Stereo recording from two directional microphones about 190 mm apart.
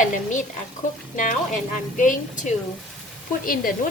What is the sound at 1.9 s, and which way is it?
A woman's voice, 40° left (ahead or behind).